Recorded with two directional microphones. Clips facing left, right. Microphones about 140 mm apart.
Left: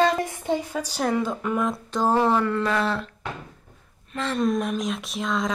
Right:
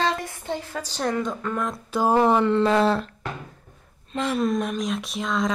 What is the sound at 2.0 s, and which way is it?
Speech, 15° right (ahead or behind).